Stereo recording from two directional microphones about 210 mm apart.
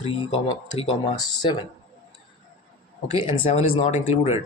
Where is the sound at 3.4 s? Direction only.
30° left (ahead or behind).